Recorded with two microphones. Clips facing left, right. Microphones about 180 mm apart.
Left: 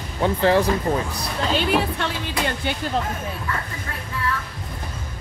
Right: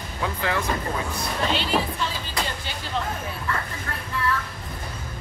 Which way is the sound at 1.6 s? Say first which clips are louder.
Left 4 dB; 60° left (ahead or behind).